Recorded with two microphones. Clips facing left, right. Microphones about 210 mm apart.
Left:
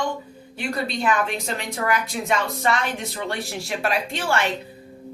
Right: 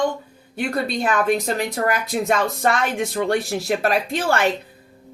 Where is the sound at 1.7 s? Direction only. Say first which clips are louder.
Right 3 dB; 45° right (ahead or behind).